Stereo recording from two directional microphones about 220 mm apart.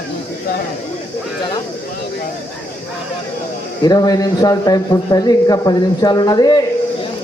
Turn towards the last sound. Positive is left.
turn(degrees=15)  # may be behind; listen again after turning